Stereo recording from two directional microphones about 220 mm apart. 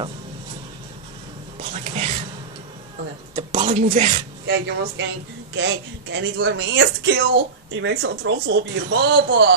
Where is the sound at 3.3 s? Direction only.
25° right (ahead or behind).